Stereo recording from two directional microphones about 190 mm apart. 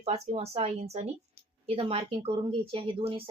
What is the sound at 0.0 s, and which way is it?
Speech, 30° right (ahead or behind).